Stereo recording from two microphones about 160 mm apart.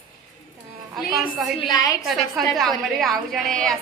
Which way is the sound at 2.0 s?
Centre (ahead or behind).